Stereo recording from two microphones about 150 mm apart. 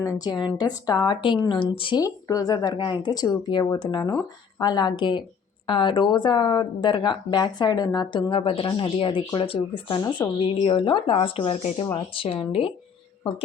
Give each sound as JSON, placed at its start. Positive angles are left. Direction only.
{"t": 0.0, "sound": "speech", "side_deg": 25}